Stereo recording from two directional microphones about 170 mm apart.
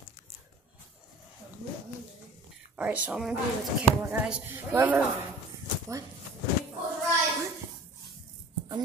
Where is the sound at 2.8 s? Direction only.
5° right (ahead or behind).